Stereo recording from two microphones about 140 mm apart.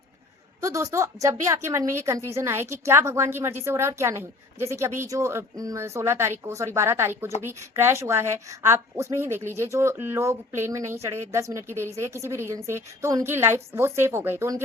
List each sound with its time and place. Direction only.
0.6 s a woman's voice: 25° right (ahead or behind)